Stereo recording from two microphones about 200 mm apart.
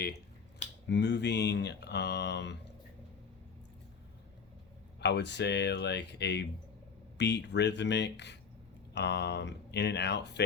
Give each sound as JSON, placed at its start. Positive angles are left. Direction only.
{"t": 0.9, "sound": "speech", "side_deg": 60}
{"t": 4.9, "sound": "speech", "side_deg": 60}